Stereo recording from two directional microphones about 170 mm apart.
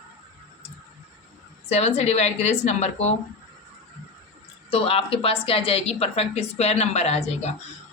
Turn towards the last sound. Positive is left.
turn(degrees=40)  # may be behind; listen again after turning